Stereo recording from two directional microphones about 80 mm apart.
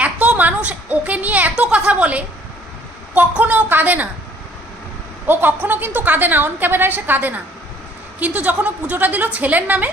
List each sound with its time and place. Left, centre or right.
0.0 s a sound: centre
3.2 s a woman's voice: centre
5.2 s a woman's voice: right